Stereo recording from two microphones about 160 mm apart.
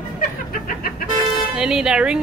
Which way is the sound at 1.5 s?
5° right (ahead or behind).